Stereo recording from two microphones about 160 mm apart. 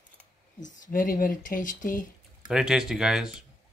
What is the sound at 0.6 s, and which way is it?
Speech, 55° left (ahead or behind).